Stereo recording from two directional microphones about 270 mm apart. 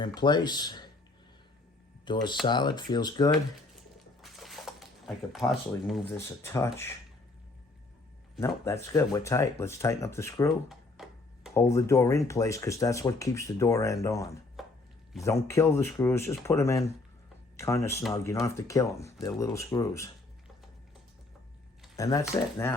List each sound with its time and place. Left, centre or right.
0.0 s speech: centre
2.0 s speech: centre
4.2 s a sound: centre
6.1 s speech: centre
8.4 s speech: centre
10.7 s a sound: centre
11.5 s speech: centre
14.6 s chopping: centre
15.2 s speech: centre
21.9 s speech: centre